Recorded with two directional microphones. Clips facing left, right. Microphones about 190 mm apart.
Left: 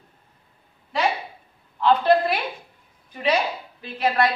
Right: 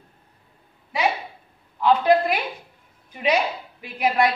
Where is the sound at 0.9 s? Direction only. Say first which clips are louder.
Even; 10° right (ahead or behind).